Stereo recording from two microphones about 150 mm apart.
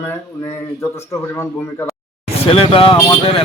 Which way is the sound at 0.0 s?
20° left (ahead or behind).